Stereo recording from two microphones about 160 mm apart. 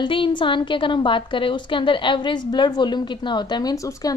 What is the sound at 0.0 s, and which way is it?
A woman's voice, 30° left (ahead or behind).